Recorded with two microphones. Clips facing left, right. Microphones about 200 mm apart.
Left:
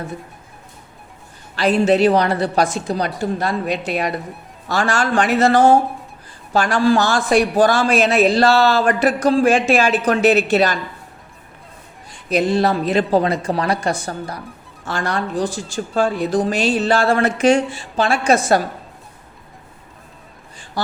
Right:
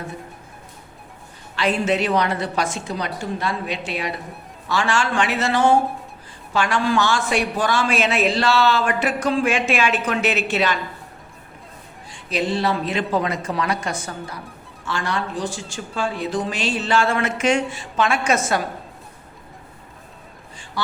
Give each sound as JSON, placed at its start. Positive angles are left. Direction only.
{"t": 1.5, "sound": "a man's voice", "side_deg": 35}
{"t": 12.3, "sound": "a man's voice", "side_deg": 45}